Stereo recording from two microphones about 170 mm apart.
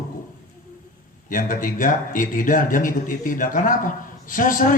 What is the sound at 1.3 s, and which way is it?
Speech, 55° left (ahead or behind).